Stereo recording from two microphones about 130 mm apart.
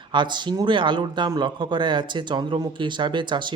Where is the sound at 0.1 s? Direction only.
35° right (ahead or behind).